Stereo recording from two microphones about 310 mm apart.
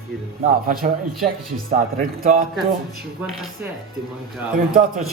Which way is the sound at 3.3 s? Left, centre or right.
Centre.